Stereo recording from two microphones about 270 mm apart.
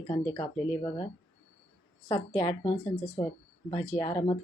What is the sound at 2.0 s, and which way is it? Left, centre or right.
Speech, centre.